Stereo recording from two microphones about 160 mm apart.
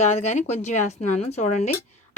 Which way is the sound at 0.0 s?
45° left (ahead or behind).